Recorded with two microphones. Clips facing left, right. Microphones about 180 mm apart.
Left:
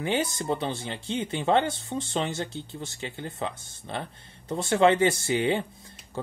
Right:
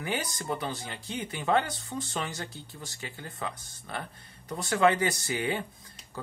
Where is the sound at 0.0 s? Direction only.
25° left (ahead or behind).